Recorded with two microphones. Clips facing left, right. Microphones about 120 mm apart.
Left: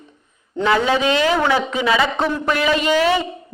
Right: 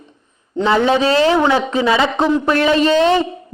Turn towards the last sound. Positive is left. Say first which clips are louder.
# right 4 dB
turn(degrees=-30)  # may be behind; listen again after turning